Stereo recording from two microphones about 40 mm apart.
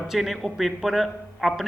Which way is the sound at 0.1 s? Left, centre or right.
Centre.